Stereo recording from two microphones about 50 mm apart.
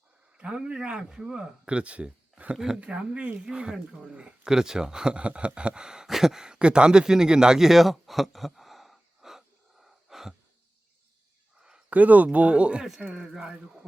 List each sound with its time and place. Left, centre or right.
0.3 s a man's voice: centre
2.6 s speech: centre
2.8 s a man's voice: right; by 9.4 s centre
9.8 s a sound: centre
11.9 s a man's voice: right
13.0 s speech: centre